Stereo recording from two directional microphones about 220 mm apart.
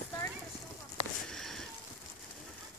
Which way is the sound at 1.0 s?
25° left (ahead or behind).